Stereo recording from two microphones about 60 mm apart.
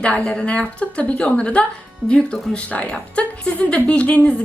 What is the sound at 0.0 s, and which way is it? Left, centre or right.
A woman's voice, centre.